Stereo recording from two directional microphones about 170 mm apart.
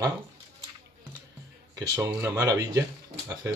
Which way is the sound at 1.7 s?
20° right (ahead or behind).